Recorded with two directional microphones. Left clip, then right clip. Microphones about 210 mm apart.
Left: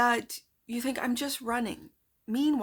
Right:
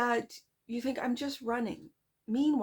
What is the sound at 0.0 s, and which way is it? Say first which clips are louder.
Speech: left 4 dB; 25° left (ahead or behind).